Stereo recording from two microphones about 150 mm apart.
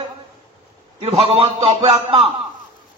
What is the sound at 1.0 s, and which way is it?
A man's voice, 40° right (ahead or behind).